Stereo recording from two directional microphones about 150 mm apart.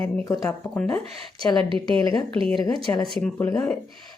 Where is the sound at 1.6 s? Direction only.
35° right (ahead or behind).